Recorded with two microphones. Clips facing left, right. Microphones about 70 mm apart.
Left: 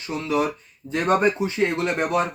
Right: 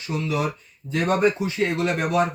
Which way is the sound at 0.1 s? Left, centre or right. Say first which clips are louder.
Left 2 dB; left.